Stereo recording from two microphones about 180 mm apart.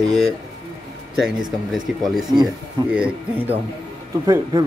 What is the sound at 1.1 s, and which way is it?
A man's voice, centre (ahead or behind).